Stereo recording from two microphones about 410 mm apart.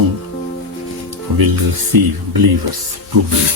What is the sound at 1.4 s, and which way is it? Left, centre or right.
Speech, right.